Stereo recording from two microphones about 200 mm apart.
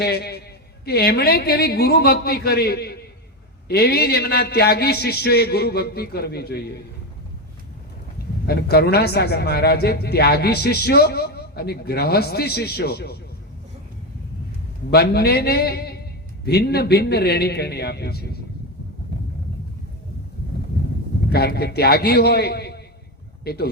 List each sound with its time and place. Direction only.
0.0 s a man's voice: 55° left (ahead or behind)
8.4 s speech: 55° left (ahead or behind)
14.8 s speech: 55° left (ahead or behind)
21.2 s speech: 50° left (ahead or behind)